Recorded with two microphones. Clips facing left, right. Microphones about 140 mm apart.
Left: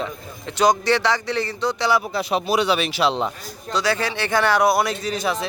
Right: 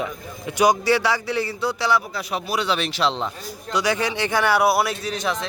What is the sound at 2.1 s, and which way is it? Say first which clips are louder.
Speech: left 5 dB; 25° left (ahead or behind).